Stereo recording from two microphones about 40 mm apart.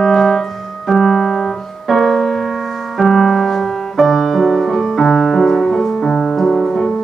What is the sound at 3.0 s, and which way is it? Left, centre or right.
Music, centre.